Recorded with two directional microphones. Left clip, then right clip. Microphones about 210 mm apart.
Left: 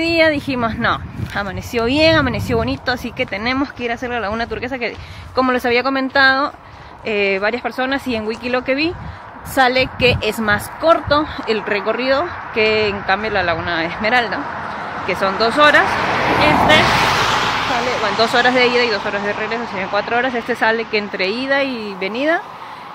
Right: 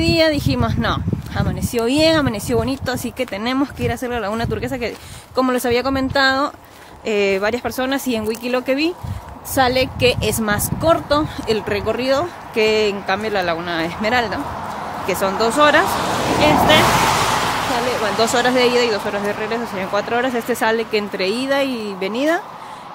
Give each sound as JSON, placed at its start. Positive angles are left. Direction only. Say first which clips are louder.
{"t": 0.0, "sound": "speech", "louder": "left 1 dB", "side_deg": -5}
{"t": 15.8, "sound": "a sound", "louder": "left 2 dB", "side_deg": 35}
{"t": 16.3, "sound": "speech", "louder": "even", "side_deg": -15}
{"t": 16.8, "sound": "vehicle", "louder": "left 1 dB", "side_deg": -50}
{"t": 18.0, "sound": "speech", "louder": "left 3 dB", "side_deg": -15}